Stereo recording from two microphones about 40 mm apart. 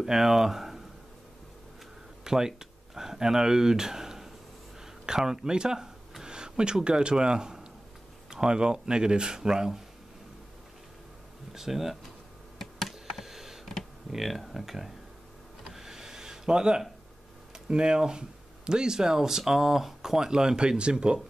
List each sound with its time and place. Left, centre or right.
0.0 s speech: centre
2.2 s speech: centre
11.5 s speech: centre
12.5 s computer keyboard: centre
13.2 s computer keyboard: centre
14.1 s speech: centre
15.7 s a sound: centre
17.6 s speech: right